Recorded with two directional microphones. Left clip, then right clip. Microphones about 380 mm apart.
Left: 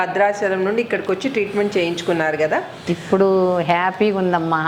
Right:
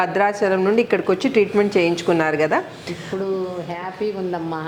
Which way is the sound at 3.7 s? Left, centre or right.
Left.